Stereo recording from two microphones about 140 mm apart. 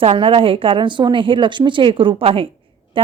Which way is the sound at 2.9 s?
40° right (ahead or behind).